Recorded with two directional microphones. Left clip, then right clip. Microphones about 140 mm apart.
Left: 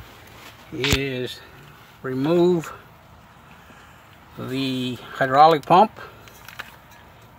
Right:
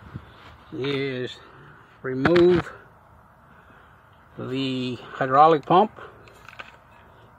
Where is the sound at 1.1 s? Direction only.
5° left (ahead or behind).